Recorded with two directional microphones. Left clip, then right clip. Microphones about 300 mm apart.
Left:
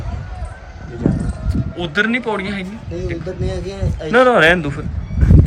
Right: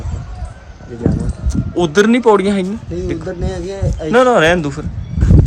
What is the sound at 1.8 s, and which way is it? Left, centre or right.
Speech, centre.